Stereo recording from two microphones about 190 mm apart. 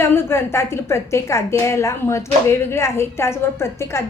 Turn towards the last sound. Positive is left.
turn(degrees=15)  # may be behind; listen again after turning